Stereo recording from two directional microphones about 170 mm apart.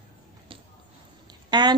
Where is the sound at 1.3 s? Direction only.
25° right (ahead or behind).